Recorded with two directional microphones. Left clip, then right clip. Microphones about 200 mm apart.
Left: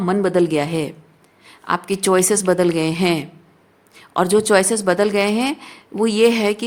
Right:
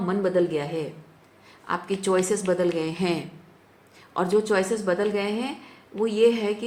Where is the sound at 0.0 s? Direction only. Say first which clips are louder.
Left 6 dB; 65° left (ahead or behind).